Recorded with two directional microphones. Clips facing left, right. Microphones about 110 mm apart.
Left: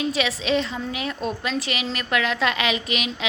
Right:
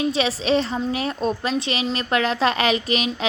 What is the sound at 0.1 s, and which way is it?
A woman's voice, 35° right (ahead or behind).